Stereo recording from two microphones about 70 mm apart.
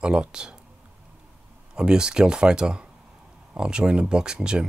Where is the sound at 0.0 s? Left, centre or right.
Centre.